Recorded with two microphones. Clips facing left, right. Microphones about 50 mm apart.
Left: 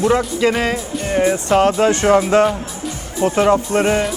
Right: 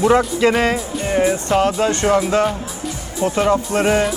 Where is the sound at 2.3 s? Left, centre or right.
Left.